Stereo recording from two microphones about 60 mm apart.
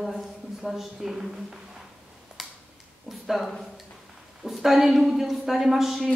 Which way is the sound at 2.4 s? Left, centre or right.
Centre.